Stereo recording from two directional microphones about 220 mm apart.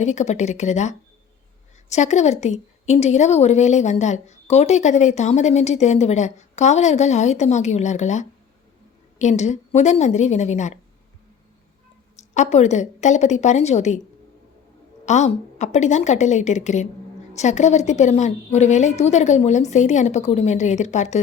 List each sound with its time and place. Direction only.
0.0 s a woman's voice: 30° left (ahead or behind)
12.1 s a woman's voice: 30° left (ahead or behind)
15.0 s a woman's voice: 30° left (ahead or behind)